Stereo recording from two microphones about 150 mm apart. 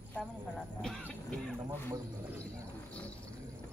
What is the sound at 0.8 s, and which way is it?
Music, 5° left (ahead or behind).